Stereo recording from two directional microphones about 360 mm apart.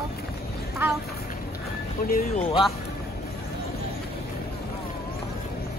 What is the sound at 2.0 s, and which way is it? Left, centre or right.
Speech, left.